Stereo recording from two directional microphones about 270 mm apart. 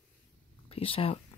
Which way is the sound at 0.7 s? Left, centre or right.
Left.